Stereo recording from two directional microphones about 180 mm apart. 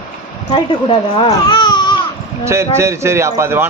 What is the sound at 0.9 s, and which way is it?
Speech, 25° left (ahead or behind).